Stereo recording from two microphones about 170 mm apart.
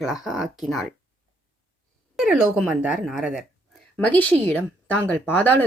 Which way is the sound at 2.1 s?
Centre (ahead or behind).